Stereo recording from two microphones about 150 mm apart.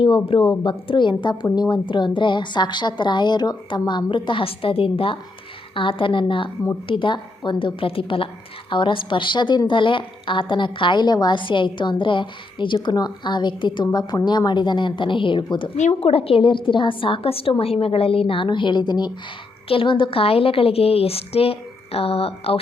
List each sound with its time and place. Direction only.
0.0 s a woman's voice: 35° left (ahead or behind)
15.8 s a woman's voice: 45° left (ahead or behind)